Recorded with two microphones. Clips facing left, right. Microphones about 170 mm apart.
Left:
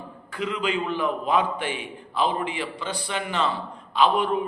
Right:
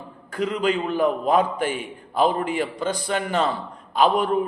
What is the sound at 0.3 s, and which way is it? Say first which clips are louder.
A man's voice: right 4 dB; 45° right (ahead or behind).